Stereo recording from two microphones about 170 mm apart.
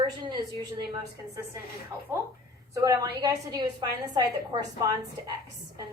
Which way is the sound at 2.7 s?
20° right (ahead or behind).